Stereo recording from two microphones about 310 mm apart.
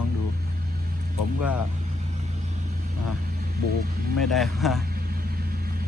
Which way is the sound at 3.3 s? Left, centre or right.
Right.